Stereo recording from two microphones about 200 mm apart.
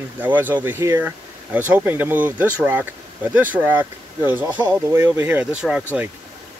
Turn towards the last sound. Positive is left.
turn(degrees=-5)  # may be behind; listen again after turning